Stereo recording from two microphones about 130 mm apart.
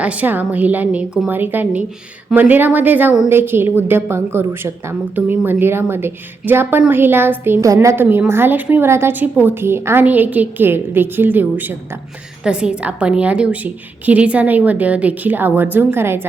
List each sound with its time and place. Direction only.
0.0 s a woman's voice: 10° right (ahead or behind)